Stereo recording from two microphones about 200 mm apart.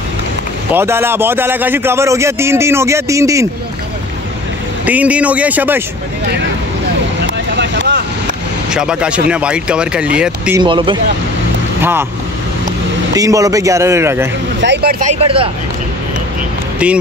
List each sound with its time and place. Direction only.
0.7 s a man's voice: 10° right (ahead or behind)
4.8 s a man's voice: 5° right (ahead or behind)
7.5 s vehicle: 60° right (ahead or behind)
8.6 s speech: 5° right (ahead or behind)
10.6 s speech: 25° right (ahead or behind)
11.8 s a man's voice: 10° right (ahead or behind)
13.1 s a man's voice: 15° right (ahead or behind)
14.6 s speech: 55° right (ahead or behind)
15.1 s speech: 25° right (ahead or behind)